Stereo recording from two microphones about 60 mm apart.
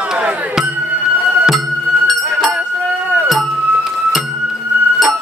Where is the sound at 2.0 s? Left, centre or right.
Centre.